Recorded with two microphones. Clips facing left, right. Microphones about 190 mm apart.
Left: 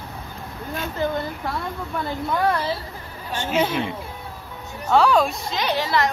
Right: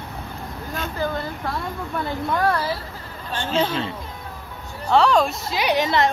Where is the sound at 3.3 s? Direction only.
10° left (ahead or behind).